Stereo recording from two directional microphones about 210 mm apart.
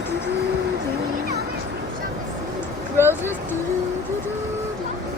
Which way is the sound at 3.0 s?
10° left (ahead or behind).